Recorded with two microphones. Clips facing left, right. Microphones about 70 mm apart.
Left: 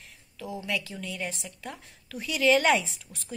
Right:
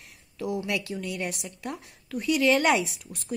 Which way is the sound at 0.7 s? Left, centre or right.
Centre.